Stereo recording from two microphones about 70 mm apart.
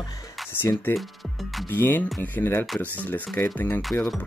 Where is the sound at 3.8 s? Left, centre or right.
Centre.